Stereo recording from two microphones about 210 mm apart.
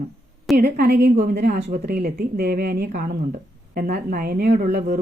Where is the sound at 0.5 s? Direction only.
50° right (ahead or behind).